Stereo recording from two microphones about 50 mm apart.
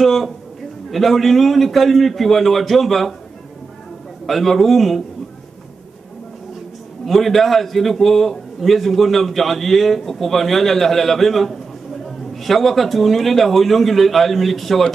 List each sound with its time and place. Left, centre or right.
0.0 s a man's voice: centre
4.3 s a man's voice: centre
7.1 s a man's voice: centre